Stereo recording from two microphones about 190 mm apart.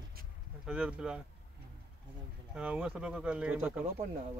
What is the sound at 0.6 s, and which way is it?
Speech, 5° right (ahead or behind).